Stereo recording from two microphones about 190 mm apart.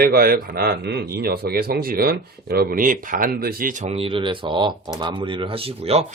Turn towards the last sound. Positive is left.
turn(degrees=-30)  # may be behind; listen again after turning